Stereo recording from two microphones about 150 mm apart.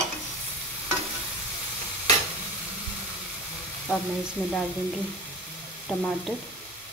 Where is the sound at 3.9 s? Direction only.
5° right (ahead or behind).